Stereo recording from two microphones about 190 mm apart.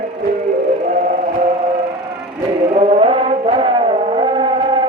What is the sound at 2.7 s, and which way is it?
Music, 30° right (ahead or behind).